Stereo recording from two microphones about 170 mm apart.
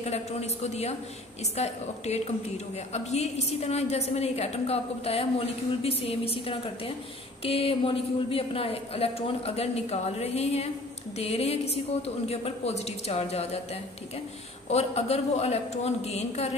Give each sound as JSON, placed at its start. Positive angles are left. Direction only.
{"t": 0.0, "sound": "a woman's voice", "side_deg": 40}
{"t": 14.7, "sound": "a woman's voice", "side_deg": 40}